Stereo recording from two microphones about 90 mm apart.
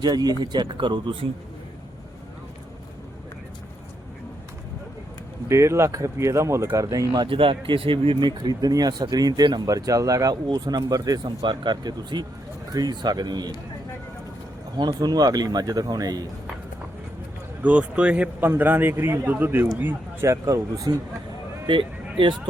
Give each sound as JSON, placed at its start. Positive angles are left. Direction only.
{"t": 0.0, "sound": "speech", "side_deg": -50}
{"t": 5.5, "sound": "speech", "side_deg": -30}
{"t": 6.8, "sound": "speech", "side_deg": -45}
{"t": 7.3, "sound": "speech", "side_deg": -80}
{"t": 14.8, "sound": "speech", "side_deg": -50}
{"t": 17.6, "sound": "a man's voice", "side_deg": -15}
{"t": 20.3, "sound": "speech", "side_deg": -40}
{"t": 20.9, "sound": "speech", "side_deg": -50}